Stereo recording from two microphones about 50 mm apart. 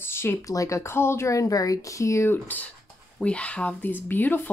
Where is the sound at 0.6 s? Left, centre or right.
Left.